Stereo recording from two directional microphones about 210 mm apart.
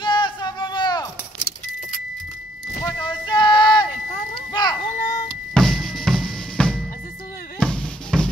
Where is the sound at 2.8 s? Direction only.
20° left (ahead or behind).